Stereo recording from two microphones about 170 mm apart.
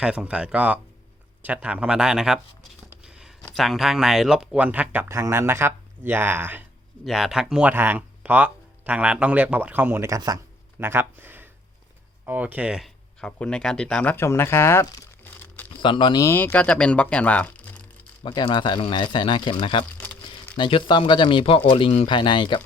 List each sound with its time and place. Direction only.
0.0 s speech: 5° right (ahead or behind)
3.0 s a sound: 5° right (ahead or behind)
3.5 s speech: centre (ahead or behind)
15.8 s speech: 30° left (ahead or behind)
16.2 s speech: 15° left (ahead or behind)
18.2 s speech: 30° left (ahead or behind)
20.0 s crumpling: 10° left (ahead or behind)
20.6 s speech: 30° left (ahead or behind)